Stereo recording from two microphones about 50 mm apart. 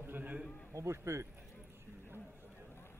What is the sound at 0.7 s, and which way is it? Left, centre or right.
Speech, right.